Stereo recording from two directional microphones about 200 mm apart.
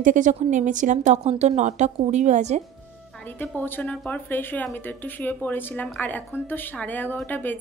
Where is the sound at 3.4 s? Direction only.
10° left (ahead or behind).